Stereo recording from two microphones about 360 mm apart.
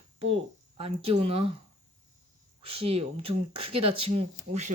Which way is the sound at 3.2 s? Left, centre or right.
Right.